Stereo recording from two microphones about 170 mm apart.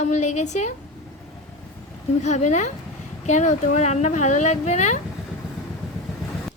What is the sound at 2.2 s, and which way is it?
Speech, 45° left (ahead or behind).